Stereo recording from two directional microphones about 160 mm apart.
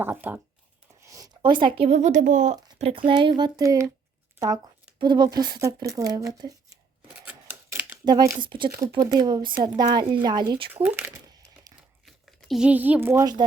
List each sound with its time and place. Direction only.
0.0 s speech: 10° right (ahead or behind)
1.1 s speech: 25° right (ahead or behind); by 2.6 s 50° right (ahead or behind)
2.7 s speech: 40° right (ahead or behind); by 6.7 s 20° right (ahead or behind)
7.3 s scissors: 15° right (ahead or behind)
8.0 s speech: 25° right (ahead or behind)
10.8 s speech: 15° right (ahead or behind)
12.0 s speech: centre (ahead or behind)